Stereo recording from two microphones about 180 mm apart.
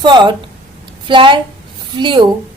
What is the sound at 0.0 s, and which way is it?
A woman's voice, 25° right (ahead or behind).